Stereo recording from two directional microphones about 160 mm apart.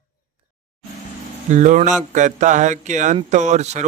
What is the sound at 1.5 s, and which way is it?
Speech, 50° right (ahead or behind).